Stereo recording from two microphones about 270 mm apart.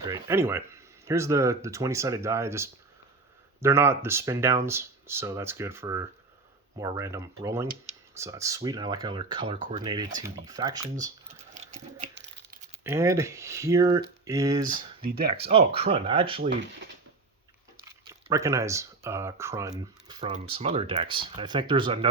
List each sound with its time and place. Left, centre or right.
0.0 s speech: centre
11.3 s a sound: right
12.1 s a sound: right
12.8 s speech: centre
15.0 s speech: right
15.4 s speech: right
16.4 s speech: right
18.3 s speech: centre